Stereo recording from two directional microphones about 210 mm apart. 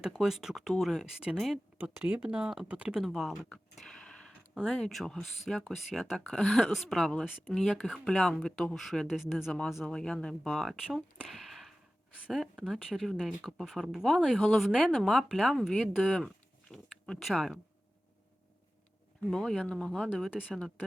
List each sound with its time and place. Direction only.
0.2 s speech: centre (ahead or behind)
19.2 s speech: centre (ahead or behind)